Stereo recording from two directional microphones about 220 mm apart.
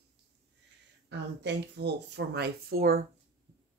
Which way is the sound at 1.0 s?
50° right (ahead or behind).